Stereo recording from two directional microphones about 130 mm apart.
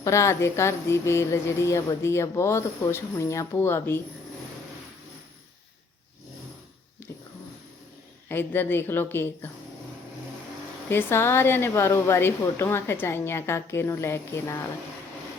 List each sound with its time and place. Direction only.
0.0 s speech: 25° left (ahead or behind)
7.1 s dog: 25° left (ahead or behind)
8.3 s a woman's voice: 15° left (ahead or behind)
10.8 s speech: 20° left (ahead or behind)